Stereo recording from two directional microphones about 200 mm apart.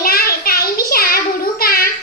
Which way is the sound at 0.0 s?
50° left (ahead or behind).